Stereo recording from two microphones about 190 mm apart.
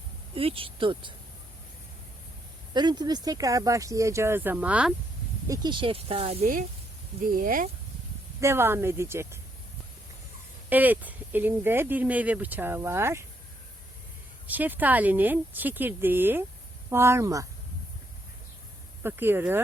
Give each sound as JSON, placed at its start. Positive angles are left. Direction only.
{"t": 0.3, "sound": "speech", "side_deg": -30}
{"t": 2.7, "sound": "speech", "side_deg": -20}
{"t": 5.5, "sound": "speech", "side_deg": -25}
{"t": 7.3, "sound": "speech", "side_deg": -45}
{"t": 8.4, "sound": "speech", "side_deg": -15}
{"t": 10.7, "sound": "speech", "side_deg": -10}
{"t": 14.4, "sound": "speech", "side_deg": -10}
{"t": 19.0, "sound": "speech", "side_deg": -10}